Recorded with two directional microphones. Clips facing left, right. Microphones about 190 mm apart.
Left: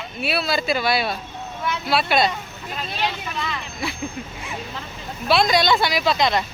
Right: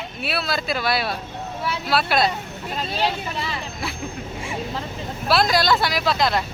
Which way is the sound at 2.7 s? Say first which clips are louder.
Right 3 dB; 35° right (ahead or behind).